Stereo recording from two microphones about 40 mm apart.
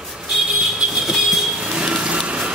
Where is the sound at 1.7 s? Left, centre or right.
Right.